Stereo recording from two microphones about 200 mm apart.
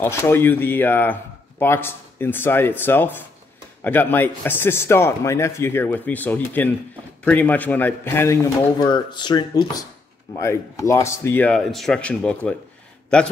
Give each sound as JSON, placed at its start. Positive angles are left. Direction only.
{"t": 0.0, "sound": "a man's voice", "side_deg": 10}